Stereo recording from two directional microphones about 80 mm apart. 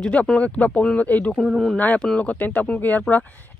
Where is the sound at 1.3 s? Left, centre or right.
Centre.